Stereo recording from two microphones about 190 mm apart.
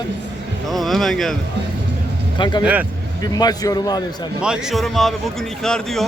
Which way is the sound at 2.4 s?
20° left (ahead or behind).